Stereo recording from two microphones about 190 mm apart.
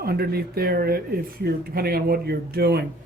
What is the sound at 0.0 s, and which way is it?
Speech, 55° right (ahead or behind).